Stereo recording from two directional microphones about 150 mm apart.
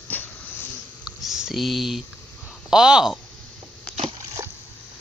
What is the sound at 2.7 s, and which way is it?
Speech, 5° right (ahead or behind).